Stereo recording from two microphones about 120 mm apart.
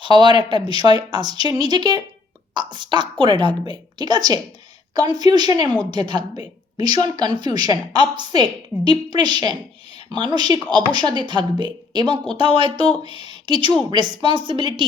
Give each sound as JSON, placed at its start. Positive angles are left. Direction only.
{"t": 0.0, "sound": "a woman's voice", "side_deg": -40}